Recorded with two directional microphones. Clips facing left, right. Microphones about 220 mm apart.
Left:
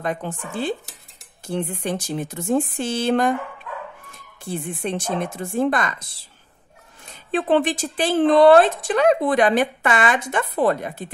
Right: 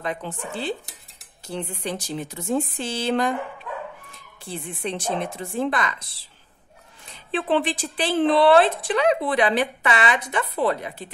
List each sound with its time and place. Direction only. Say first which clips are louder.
0.0 s speech: left 3 dB; 50° left (ahead or behind)
4.5 s speech: left 4 dB; 50° left (ahead or behind)
7.2 s speech: left 4 dB; 45° left (ahead or behind)